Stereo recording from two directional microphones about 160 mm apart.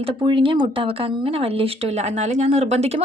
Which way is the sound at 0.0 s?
30° right (ahead or behind).